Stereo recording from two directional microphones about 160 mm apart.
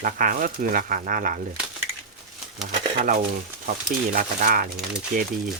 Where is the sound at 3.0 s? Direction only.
55° right (ahead or behind).